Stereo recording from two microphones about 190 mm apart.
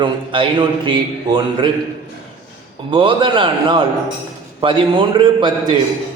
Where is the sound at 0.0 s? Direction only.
25° right (ahead or behind).